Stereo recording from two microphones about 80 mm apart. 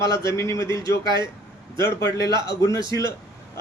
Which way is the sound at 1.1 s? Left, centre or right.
Right.